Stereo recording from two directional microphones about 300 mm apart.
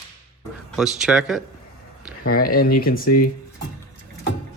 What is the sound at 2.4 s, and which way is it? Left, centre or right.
Speech, left.